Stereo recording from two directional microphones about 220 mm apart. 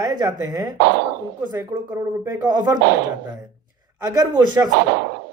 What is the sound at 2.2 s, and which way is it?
Speech, 15° right (ahead or behind).